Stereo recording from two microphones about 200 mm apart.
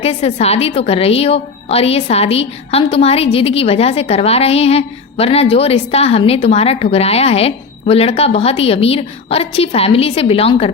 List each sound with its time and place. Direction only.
0.0 s a woman's voice: 30° left (ahead or behind)